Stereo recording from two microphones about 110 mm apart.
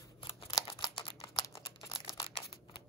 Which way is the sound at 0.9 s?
50° left (ahead or behind).